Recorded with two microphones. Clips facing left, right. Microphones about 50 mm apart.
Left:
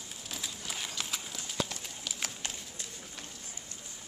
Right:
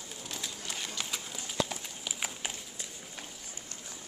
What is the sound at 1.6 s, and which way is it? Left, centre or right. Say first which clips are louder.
Clip-clop: right 2 dB; centre.